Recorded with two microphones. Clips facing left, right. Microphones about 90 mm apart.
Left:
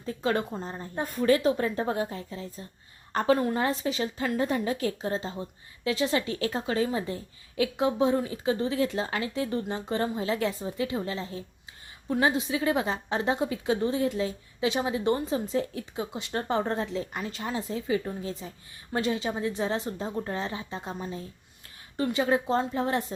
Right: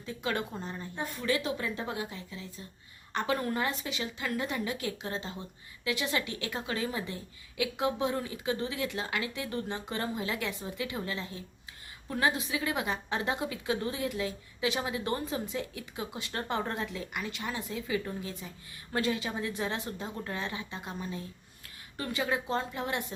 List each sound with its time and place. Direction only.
0.0 s a woman's voice: 35° left (ahead or behind)